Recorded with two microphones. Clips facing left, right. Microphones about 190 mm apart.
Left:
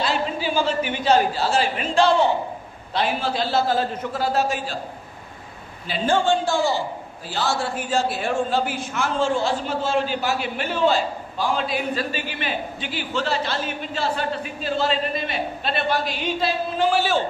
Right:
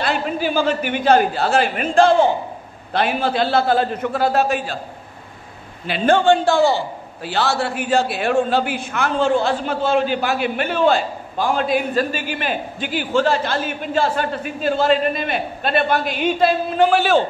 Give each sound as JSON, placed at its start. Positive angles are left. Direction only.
{"t": 0.0, "sound": "a man's voice", "side_deg": -60}
{"t": 5.9, "sound": "a man's voice", "side_deg": -65}